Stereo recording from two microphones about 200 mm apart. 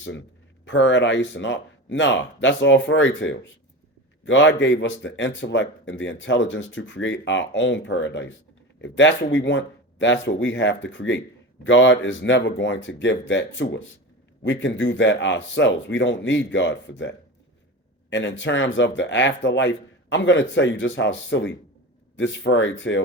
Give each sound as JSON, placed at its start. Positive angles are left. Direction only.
{"t": 0.6, "sound": "speech", "side_deg": 65}